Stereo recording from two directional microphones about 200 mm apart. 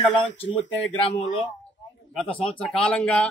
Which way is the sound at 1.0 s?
25° left (ahead or behind).